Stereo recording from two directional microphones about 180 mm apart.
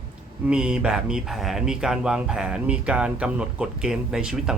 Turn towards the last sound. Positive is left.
turn(degrees=-5)  # may be behind; listen again after turning